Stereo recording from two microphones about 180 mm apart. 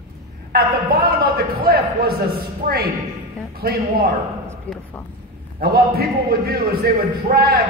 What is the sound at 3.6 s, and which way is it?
Speech, 55° right (ahead or behind).